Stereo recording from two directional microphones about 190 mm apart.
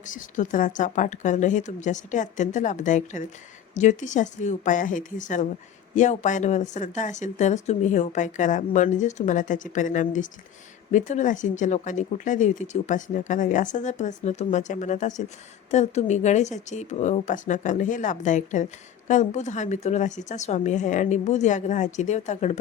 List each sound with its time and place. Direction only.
0.0 s a woman's voice: 40° left (ahead or behind)